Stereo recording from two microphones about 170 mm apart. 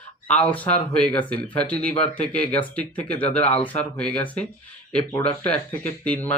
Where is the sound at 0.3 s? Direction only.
10° left (ahead or behind).